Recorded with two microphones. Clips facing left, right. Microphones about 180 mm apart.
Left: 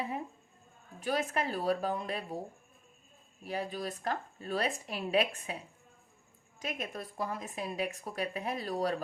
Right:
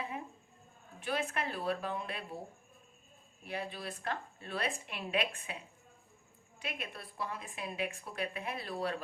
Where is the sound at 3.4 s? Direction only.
40° left (ahead or behind).